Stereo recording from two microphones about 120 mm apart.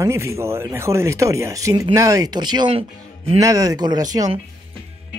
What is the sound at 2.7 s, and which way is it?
Speech, 55° right (ahead or behind).